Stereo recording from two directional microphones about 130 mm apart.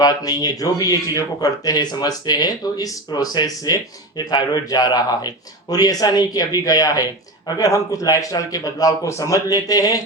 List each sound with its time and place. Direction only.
0.0 s speech: 30° left (ahead or behind)